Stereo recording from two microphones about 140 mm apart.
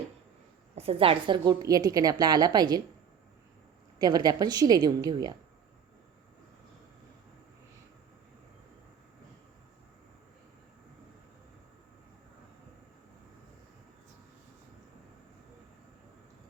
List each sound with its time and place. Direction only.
0.8 s a woman's voice: 45° right (ahead or behind)
3.9 s a woman's voice: 30° right (ahead or behind)